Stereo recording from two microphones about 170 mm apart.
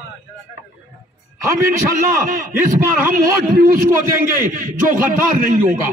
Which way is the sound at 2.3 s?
55° right (ahead or behind).